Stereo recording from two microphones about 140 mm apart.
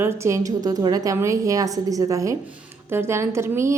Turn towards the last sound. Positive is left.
turn(degrees=-20)  # may be behind; listen again after turning